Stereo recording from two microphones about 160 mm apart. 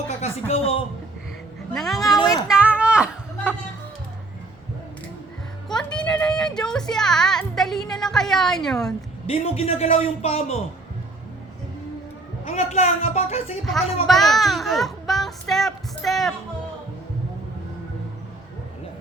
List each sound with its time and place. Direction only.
0.2 s a man's voice: 40° left (ahead or behind)
1.7 s speech: centre (ahead or behind)
2.1 s speech: 25° left (ahead or behind)
2.5 s a sound: 5° right (ahead or behind)
5.6 s music: 5° left (ahead or behind)
9.2 s a man's voice: 40° left (ahead or behind)
12.5 s speech: 45° left (ahead or behind)
14.1 s speech: centre (ahead or behind)